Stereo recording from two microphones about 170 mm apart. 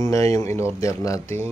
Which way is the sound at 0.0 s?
20° left (ahead or behind).